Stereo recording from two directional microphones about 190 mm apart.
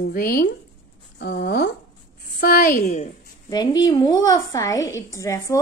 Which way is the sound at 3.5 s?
20° left (ahead or behind).